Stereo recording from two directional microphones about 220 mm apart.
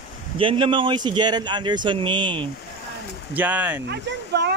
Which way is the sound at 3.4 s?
10° right (ahead or behind).